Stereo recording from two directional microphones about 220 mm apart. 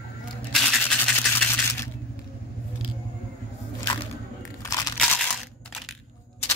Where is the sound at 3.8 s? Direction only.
15° left (ahead or behind).